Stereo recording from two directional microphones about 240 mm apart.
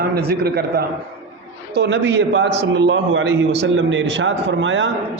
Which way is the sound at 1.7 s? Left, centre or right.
Right.